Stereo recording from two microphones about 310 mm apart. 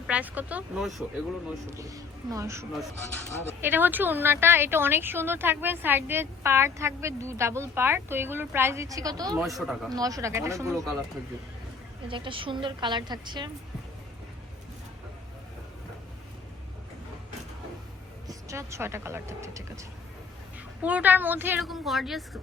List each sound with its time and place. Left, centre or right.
0.1 s a woman's voice: centre
1.7 s a woman's voice: centre
9.4 s a woman's voice: centre
9.9 s a woman's voice: centre
12.0 s a woman's voice: centre
18.3 s speech: centre
20.8 s a woman's voice: centre